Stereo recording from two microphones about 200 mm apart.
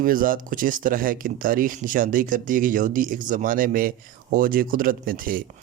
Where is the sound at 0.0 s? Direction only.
45° right (ahead or behind).